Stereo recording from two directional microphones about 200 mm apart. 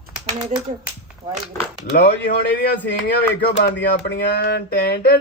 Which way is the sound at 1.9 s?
50° left (ahead or behind).